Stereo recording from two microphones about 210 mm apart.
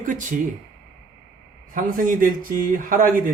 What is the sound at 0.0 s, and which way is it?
Speech, 40° right (ahead or behind).